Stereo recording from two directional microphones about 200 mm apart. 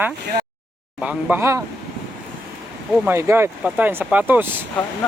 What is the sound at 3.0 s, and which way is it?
Speech, 10° right (ahead or behind).